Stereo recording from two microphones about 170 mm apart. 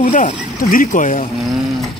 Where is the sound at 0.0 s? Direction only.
50° left (ahead or behind).